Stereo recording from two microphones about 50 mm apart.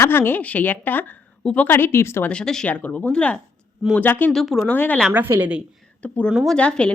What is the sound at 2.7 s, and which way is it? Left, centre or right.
Speech, left.